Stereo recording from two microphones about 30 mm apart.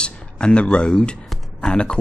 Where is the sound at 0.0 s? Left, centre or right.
Left.